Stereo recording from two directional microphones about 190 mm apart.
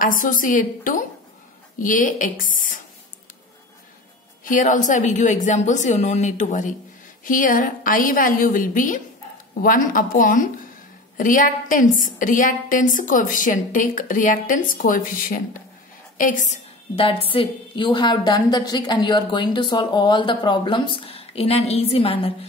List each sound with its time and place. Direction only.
0.0 s a woman's voice: 45° left (ahead or behind)
4.5 s a woman's voice: 45° left (ahead or behind)
16.9 s a woman's voice: 30° left (ahead or behind)